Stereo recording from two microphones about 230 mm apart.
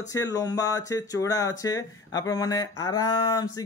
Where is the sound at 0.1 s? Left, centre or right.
Centre.